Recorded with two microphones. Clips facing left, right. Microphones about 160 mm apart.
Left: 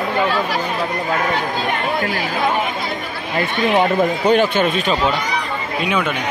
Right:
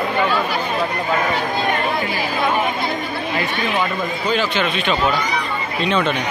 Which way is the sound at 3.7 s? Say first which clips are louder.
Left 6 dB; 65° left (ahead or behind).